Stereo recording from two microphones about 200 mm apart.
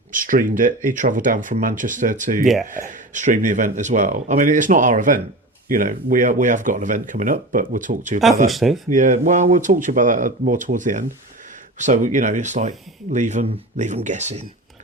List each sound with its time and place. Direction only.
0.1 s speech: 40° right (ahead or behind)
2.4 s speech: centre (ahead or behind)
2.6 s speech: 40° right (ahead or behind)
8.4 s speech: centre (ahead or behind)
8.9 s speech: 40° right (ahead or behind)